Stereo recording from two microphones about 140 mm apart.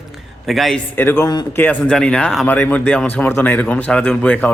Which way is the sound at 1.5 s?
15° left (ahead or behind).